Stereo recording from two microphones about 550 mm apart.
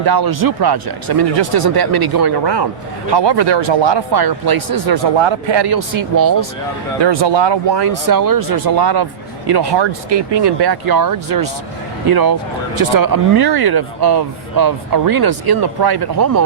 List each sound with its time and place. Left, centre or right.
0.0 s speech: right
5.1 s speech: right
7.0 s speech: right
8.0 s speech: right